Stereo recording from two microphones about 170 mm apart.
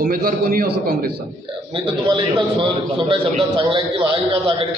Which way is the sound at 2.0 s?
30° right (ahead or behind).